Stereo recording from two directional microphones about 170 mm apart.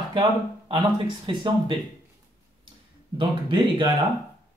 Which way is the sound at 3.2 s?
30° right (ahead or behind).